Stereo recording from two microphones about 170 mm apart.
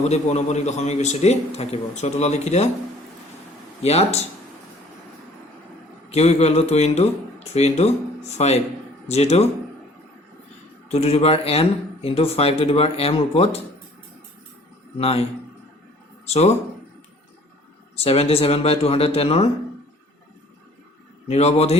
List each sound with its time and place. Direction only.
0.0 s speech: 40° left (ahead or behind)
3.8 s speech: 40° left (ahead or behind)
6.1 s speech: 40° left (ahead or behind)
10.8 s speech: 40° left (ahead or behind)
14.9 s speech: 35° left (ahead or behind)
16.2 s speech: 40° left (ahead or behind)
17.9 s speech: 35° left (ahead or behind)
21.2 s speech: 40° left (ahead or behind)